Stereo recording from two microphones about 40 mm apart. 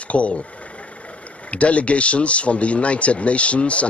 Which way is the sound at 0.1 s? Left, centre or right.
Left.